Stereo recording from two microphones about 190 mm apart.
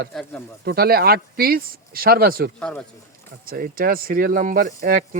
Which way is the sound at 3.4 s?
50° right (ahead or behind).